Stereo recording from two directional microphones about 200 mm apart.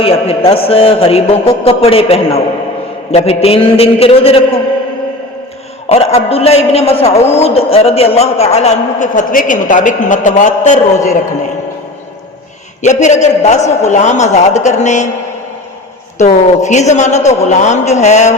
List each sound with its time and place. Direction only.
0.0 s a man's voice: 30° left (ahead or behind)
5.9 s a man's voice: 30° left (ahead or behind)
12.8 s a man's voice: 35° left (ahead or behind)
16.1 s a man's voice: 35° left (ahead or behind)